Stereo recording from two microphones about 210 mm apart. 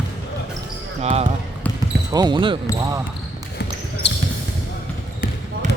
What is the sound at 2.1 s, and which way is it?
Speech, 20° right (ahead or behind).